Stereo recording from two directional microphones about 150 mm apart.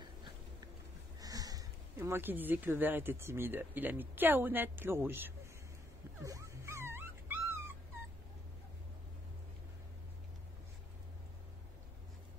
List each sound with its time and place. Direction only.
1.2 s speech: 25° right (ahead or behind)
6.2 s dog: 20° right (ahead or behind)